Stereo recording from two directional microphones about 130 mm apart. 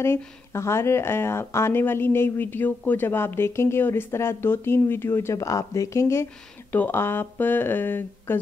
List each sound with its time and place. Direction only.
0.0 s speech: 20° left (ahead or behind)